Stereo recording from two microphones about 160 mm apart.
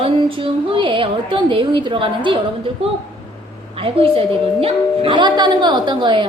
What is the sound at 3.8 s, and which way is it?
A woman's voice, 35° right (ahead or behind).